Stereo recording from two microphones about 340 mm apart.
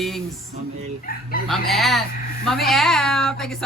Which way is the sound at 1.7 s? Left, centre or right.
Centre.